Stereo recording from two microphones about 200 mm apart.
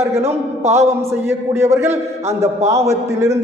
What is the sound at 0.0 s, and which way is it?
Speech, 15° right (ahead or behind).